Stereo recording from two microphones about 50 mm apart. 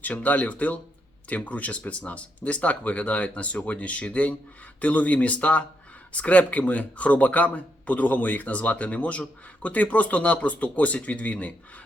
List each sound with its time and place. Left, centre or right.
0.0 s speech: left